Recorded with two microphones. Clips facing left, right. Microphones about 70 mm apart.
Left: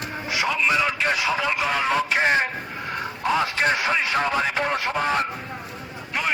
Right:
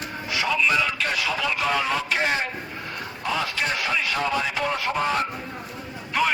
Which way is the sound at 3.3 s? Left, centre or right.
Left.